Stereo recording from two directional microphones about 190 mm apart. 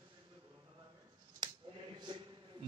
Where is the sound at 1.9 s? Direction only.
25° right (ahead or behind).